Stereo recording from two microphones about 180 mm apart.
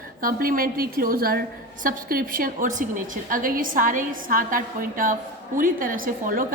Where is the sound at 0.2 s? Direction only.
50° right (ahead or behind).